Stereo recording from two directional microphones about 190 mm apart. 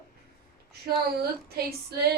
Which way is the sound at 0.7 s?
55° right (ahead or behind).